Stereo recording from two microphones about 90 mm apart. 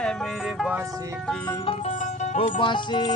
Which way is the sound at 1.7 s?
90° left.